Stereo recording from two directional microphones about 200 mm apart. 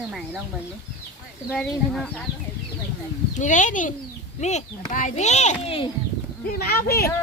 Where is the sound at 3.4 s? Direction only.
40° left (ahead or behind).